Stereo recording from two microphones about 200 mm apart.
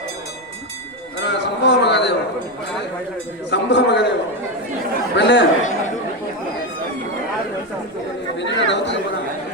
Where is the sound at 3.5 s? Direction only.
60° left (ahead or behind).